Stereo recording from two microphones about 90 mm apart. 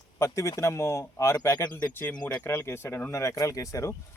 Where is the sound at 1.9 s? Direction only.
15° left (ahead or behind).